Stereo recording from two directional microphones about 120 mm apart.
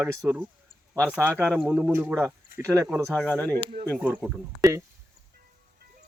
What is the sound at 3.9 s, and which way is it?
Speech, 15° right (ahead or behind).